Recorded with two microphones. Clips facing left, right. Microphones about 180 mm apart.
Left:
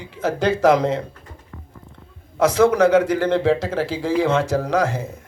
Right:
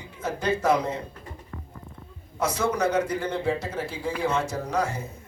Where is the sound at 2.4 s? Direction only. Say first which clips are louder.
Left 10 dB; 90° left.